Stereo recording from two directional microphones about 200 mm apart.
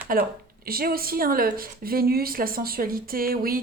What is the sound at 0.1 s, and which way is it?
A woman's voice, 45° right (ahead or behind).